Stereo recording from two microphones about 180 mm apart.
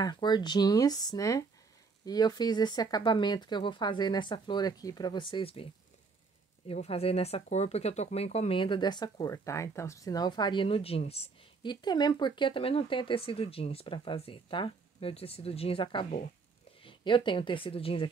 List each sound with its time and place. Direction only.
0.0 s speech: 25° left (ahead or behind)
6.7 s speech: 35° left (ahead or behind)